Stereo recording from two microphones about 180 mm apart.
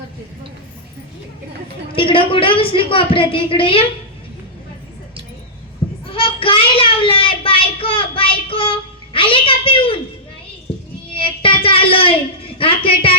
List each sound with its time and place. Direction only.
1.9 s a woman's voice: 30° left (ahead or behind)
6.1 s child singing: 30° left (ahead or behind)
11.1 s a sound: 30° left (ahead or behind)